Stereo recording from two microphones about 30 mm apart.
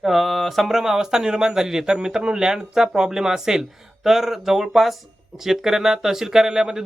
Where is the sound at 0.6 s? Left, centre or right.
Centre.